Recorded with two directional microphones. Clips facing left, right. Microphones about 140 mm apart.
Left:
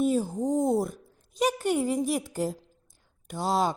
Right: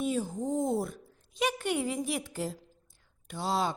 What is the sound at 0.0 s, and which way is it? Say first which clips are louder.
A woman's voice: left 6 dB; 40° left (ahead or behind).